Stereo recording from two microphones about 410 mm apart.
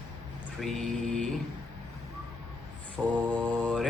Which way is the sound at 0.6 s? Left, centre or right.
Centre.